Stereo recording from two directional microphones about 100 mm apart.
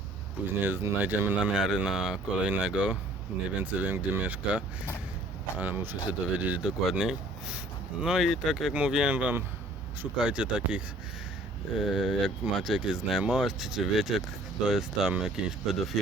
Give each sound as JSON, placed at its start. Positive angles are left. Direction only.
{"t": 0.6, "sound": "speech", "side_deg": -20}
{"t": 1.5, "sound": "speech", "side_deg": -5}